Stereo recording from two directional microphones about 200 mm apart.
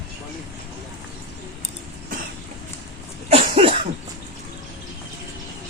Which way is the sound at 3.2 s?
30° right (ahead or behind).